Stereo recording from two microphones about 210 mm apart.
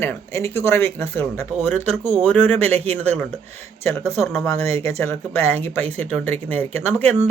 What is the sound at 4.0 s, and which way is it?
Speech, 10° left (ahead or behind).